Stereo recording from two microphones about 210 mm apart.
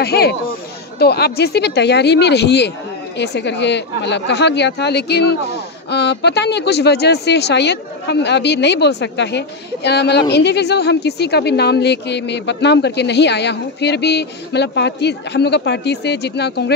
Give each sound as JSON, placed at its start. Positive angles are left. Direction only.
{"t": 0.0, "sound": "speech", "side_deg": 50}